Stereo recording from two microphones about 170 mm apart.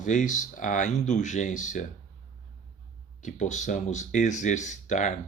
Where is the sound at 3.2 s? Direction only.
45° left (ahead or behind).